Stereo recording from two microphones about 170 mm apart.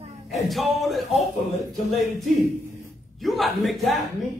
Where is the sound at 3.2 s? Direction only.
Centre (ahead or behind).